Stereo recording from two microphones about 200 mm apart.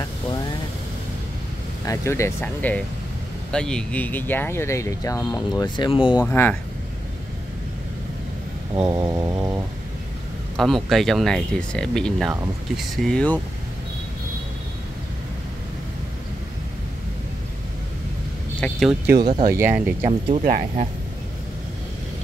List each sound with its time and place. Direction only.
1.9 s speech: 15° left (ahead or behind)
6.2 s speech: 10° left (ahead or behind)
8.8 s mantra: 15° right (ahead or behind)
10.5 s speech: centre (ahead or behind)
18.6 s speech: centre (ahead or behind)
19.5 s speech: 10° right (ahead or behind)
20.1 s speech: 25° right (ahead or behind)
20.4 s speech: 40° right (ahead or behind)